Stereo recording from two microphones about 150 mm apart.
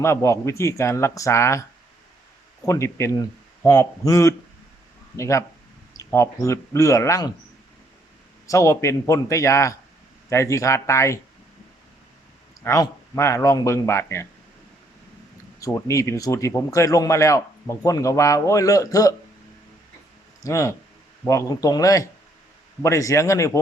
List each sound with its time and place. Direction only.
0.0 s speech: 20° left (ahead or behind)
2.6 s speech: 20° left (ahead or behind)
8.4 s speech: 20° left (ahead or behind)
12.6 s speech: 20° left (ahead or behind)
15.6 s speech: 20° left (ahead or behind)
20.4 s speech: 20° left (ahead or behind)